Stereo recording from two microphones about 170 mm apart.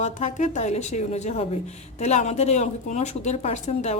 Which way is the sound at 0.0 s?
45° left (ahead or behind).